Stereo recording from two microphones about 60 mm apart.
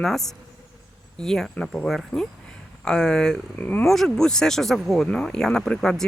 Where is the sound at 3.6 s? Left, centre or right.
Left.